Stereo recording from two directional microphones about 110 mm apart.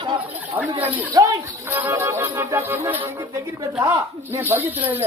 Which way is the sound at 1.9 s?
25° right (ahead or behind).